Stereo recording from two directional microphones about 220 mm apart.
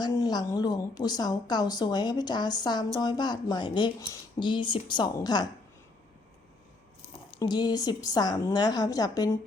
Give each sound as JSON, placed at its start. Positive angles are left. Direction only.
{"t": 0.0, "sound": "a woman's voice", "side_deg": 20}
{"t": 7.3, "sound": "a woman's voice", "side_deg": 20}